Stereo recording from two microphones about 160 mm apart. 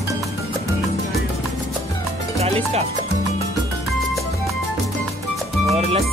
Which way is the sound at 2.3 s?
40° right (ahead or behind).